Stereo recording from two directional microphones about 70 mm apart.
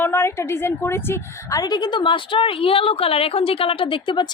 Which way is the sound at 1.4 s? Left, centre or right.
Left.